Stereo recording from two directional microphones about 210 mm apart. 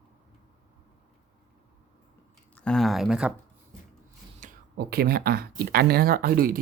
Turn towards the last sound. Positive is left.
turn(degrees=-45)  # may be behind; listen again after turning